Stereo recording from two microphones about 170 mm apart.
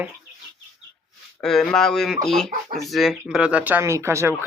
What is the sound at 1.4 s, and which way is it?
Speech, centre (ahead or behind).